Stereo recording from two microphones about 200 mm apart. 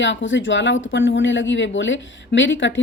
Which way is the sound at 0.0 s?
65° left (ahead or behind).